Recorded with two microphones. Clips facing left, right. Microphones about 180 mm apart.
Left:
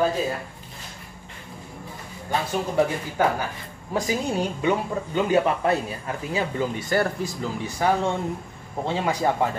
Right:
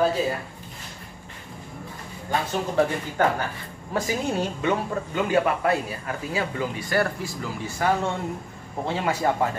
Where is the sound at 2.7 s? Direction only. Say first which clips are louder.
Even; 10° left (ahead or behind).